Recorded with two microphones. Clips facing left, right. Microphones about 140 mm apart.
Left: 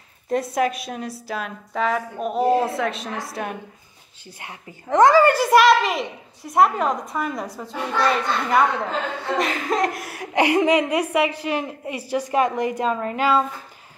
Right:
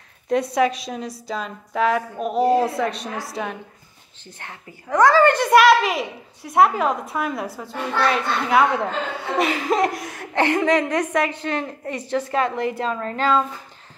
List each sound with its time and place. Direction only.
0.3 s a child's voice: centre (ahead or behind)
0.6 s a woman's voice: 55° left (ahead or behind)
1.2 s a child's voice: 5° left (ahead or behind)
4.2 s a woman's voice: 10° left (ahead or behind)
4.8 s speech: 20° left (ahead or behind)
5.2 s a child's voice: 5° left (ahead or behind)